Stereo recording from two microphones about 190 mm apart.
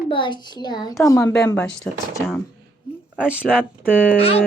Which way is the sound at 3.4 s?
Centre (ahead or behind).